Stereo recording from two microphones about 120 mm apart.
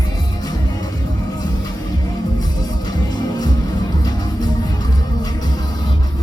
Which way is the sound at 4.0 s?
35° left (ahead or behind).